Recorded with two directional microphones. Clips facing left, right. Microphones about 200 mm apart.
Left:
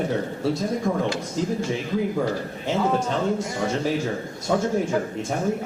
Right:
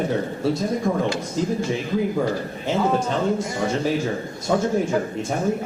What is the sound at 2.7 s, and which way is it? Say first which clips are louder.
A man's voice: right 1 dB; 25° right (ahead or behind).